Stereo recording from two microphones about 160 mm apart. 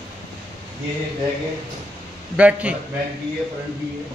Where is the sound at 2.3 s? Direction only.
10° right (ahead or behind).